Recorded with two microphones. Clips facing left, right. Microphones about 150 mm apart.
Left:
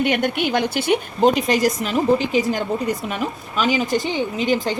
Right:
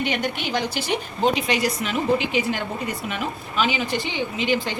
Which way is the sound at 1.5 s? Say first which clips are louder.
Left 4 dB; 45° left (ahead or behind).